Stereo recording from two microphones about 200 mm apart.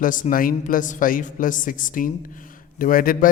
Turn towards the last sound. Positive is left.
turn(degrees=45)  # may be behind; listen again after turning